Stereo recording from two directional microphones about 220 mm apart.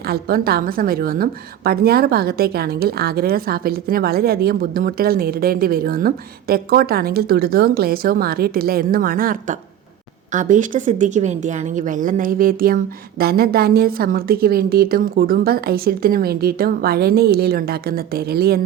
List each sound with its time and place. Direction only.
0.0 s a woman's voice: 45° right (ahead or behind)